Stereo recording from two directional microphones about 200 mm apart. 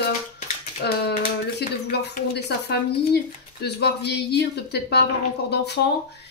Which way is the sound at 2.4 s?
55° left (ahead or behind).